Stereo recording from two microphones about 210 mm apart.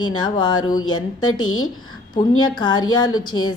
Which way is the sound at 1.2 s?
90° left.